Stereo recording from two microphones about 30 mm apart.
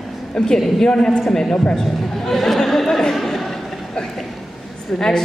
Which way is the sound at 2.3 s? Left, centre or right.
Centre.